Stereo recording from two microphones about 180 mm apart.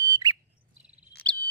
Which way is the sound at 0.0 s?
20° right (ahead or behind).